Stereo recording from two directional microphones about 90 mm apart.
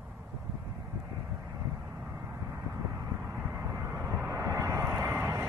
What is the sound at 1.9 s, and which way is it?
Vehicle, 25° right (ahead or behind).